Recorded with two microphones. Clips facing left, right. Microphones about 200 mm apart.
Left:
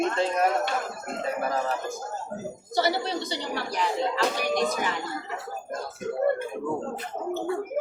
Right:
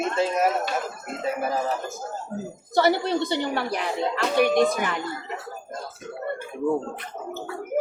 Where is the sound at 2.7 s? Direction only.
55° right (ahead or behind).